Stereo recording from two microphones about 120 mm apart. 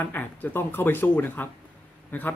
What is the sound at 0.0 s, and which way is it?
Speech, 15° left (ahead or behind).